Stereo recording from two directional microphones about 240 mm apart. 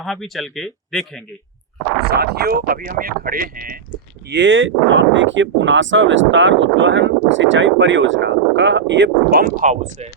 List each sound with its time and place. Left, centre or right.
0.0 s speech: centre
2.0 s speech: right
4.3 s speech: right